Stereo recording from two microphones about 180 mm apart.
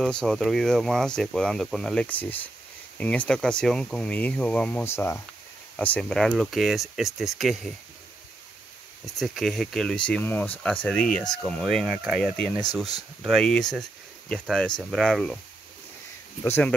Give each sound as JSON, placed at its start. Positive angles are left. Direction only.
{"t": 0.0, "sound": "speech", "side_deg": 5}
{"t": 9.2, "sound": "speech", "side_deg": 0}
{"t": 16.4, "sound": "speech", "side_deg": 10}